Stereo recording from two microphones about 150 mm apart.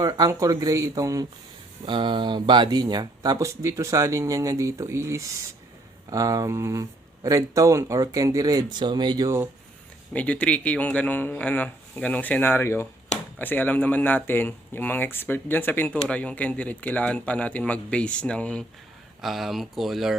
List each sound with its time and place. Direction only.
0.0 s speech: 25° right (ahead or behind)
1.8 s speech: 35° right (ahead or behind)
10.1 s speech: 10° left (ahead or behind)